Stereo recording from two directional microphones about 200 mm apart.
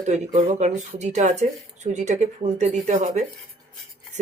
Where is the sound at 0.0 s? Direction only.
35° right (ahead or behind).